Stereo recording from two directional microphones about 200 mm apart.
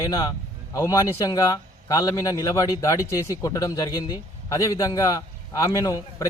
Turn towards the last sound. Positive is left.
turn(degrees=15)  # may be behind; listen again after turning